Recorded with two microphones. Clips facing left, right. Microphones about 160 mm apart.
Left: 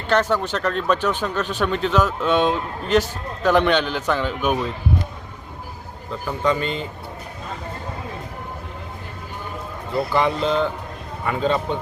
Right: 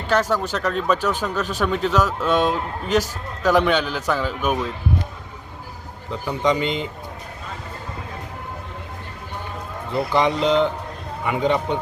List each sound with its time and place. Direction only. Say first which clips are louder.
0.1 s a man's voice: left 1 dB; 5° right (ahead or behind)
6.1 s a man's voice: right 1 dB; 20° right (ahead or behind)
9.9 s a man's voice: right 1 dB; 20° right (ahead or behind)